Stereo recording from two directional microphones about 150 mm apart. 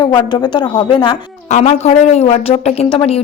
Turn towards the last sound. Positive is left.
turn(degrees=40)  # may be behind; listen again after turning